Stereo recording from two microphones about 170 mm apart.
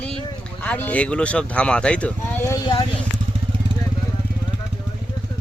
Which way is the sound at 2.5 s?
30° left (ahead or behind).